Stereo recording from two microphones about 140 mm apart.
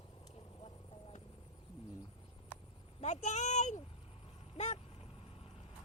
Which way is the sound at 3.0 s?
55° left (ahead or behind).